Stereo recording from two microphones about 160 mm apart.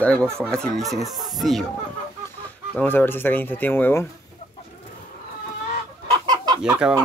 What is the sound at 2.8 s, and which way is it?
Speech, 10° left (ahead or behind).